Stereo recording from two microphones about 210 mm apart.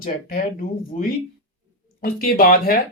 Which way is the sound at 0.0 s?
45° left (ahead or behind).